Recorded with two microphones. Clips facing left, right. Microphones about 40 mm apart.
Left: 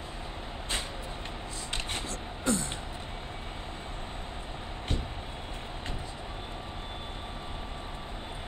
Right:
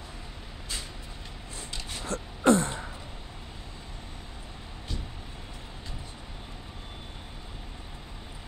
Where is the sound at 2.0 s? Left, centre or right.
Right.